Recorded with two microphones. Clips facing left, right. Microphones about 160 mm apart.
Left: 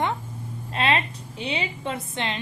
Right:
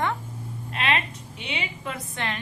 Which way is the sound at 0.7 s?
30° left (ahead or behind).